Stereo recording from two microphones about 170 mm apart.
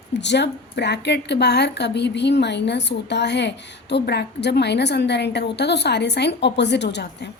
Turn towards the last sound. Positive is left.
turn(degrees=85)